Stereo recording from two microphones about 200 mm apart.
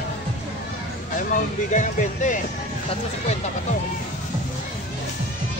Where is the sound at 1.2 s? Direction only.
40° left (ahead or behind).